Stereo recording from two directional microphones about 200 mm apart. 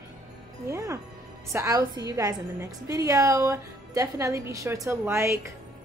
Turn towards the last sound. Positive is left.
turn(degrees=-15)  # may be behind; listen again after turning